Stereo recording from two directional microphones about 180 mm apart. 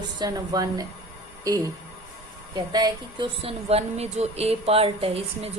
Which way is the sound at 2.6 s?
25° right (ahead or behind).